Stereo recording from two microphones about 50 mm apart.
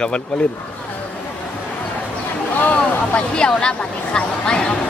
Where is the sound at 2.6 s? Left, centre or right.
Left.